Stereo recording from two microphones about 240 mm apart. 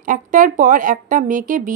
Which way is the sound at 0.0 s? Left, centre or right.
Right.